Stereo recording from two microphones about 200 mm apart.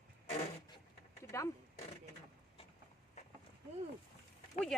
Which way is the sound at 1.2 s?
15° left (ahead or behind).